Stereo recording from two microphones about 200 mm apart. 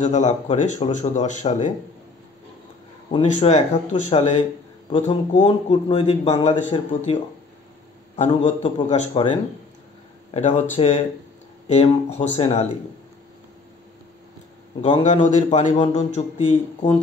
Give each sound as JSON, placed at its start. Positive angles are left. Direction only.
{"t": 0.0, "sound": "speech", "side_deg": 35}
{"t": 3.1, "sound": "a man's voice", "side_deg": 30}
{"t": 8.2, "sound": "a man's voice", "side_deg": 30}
{"t": 14.8, "sound": "speech", "side_deg": 30}